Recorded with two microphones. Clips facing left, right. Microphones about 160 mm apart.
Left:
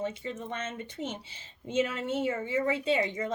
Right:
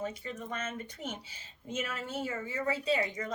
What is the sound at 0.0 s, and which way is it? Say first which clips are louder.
A woman's voice: left 3 dB; 25° left (ahead or behind).